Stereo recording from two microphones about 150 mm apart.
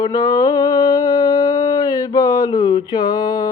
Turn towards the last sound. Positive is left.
turn(degrees=25)  # may be behind; listen again after turning